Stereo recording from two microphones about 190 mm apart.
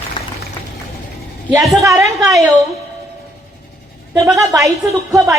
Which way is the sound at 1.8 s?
15° right (ahead or behind).